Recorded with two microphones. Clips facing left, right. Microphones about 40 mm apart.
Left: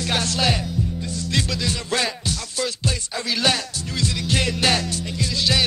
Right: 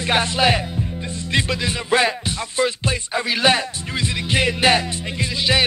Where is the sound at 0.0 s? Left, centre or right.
Right.